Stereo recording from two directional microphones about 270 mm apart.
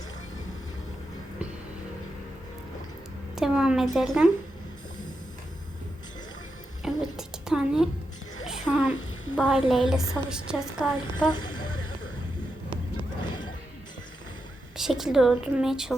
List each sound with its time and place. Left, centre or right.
3.3 s a sound: centre
3.9 s a woman's voice: centre
6.8 s a sound: centre
9.9 s a woman's voice: centre
11.2 s speech: centre
14.8 s a woman's voice: centre